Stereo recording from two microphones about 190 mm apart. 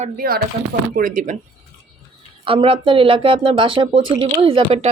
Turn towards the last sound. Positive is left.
turn(degrees=-30)  # may be behind; listen again after turning